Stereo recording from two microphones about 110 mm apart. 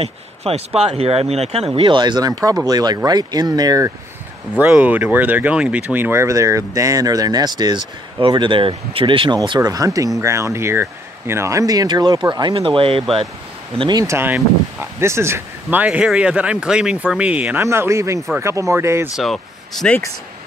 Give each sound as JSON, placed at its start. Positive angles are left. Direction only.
{"t": 0.0, "sound": "speech", "side_deg": -65}
{"t": 1.8, "sound": "speech", "side_deg": -45}
{"t": 4.6, "sound": "speech", "side_deg": -15}
{"t": 12.5, "sound": "speech", "side_deg": -55}
{"t": 13.7, "sound": "speech", "side_deg": -40}
{"t": 14.0, "sound": "speech", "side_deg": -25}
{"t": 17.6, "sound": "speech", "side_deg": -25}
{"t": 19.1, "sound": "speech", "side_deg": 0}